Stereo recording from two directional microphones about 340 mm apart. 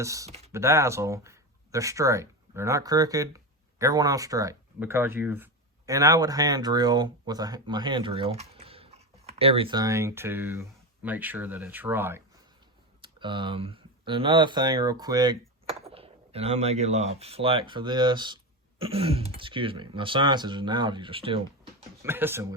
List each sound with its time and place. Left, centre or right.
0.0 s speech: centre
0.5 s speech: centre